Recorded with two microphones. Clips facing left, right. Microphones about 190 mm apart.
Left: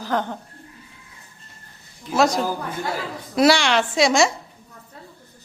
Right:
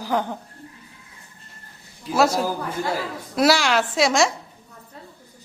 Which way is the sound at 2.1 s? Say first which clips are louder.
Even; 5° right (ahead or behind).